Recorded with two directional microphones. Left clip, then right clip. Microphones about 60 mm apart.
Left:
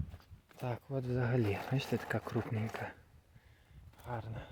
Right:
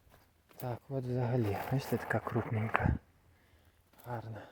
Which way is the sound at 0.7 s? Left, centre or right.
Centre.